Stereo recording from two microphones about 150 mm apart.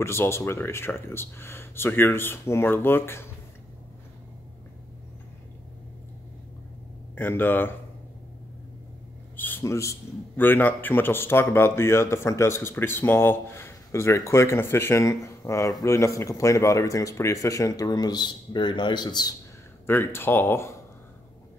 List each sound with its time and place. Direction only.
0.0 s speech: 15° left (ahead or behind)
7.2 s speech: 15° left (ahead or behind)
9.4 s a man's voice: 15° left (ahead or behind)
19.9 s speech: 15° left (ahead or behind)